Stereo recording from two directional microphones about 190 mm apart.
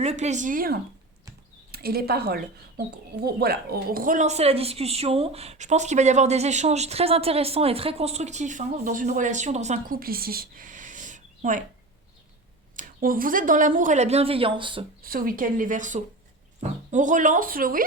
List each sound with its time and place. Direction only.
0.0 s speech: 35° right (ahead or behind)
12.7 s speech: 45° right (ahead or behind); by 14.8 s 25° right (ahead or behind)
15.0 s speech: 50° right (ahead or behind)